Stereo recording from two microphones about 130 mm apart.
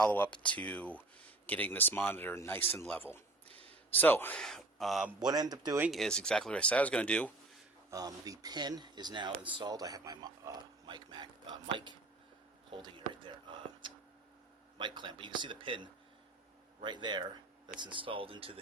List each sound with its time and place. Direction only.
0.0 s speech: 10° left (ahead or behind)
3.5 s a sound: 50° right (ahead or behind)
3.9 s speech: 15° left (ahead or behind)
4.4 s speech: 5° left (ahead or behind)
5.2 s speech: 30° right (ahead or behind)
5.9 s speech: 5° left (ahead or behind)
7.9 s speech: 30° right (ahead or behind)
12.7 s a sound: 40° right (ahead or behind)
14.8 s speech: 35° right (ahead or behind)